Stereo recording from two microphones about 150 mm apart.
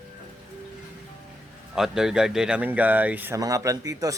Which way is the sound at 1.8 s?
5° right (ahead or behind).